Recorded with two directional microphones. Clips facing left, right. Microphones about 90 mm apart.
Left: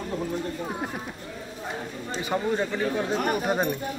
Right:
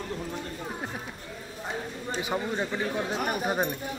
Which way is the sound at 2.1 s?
15° right (ahead or behind).